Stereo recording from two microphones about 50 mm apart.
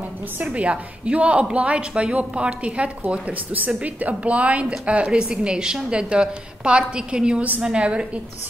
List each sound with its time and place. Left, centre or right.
0.5 s a woman's voice: right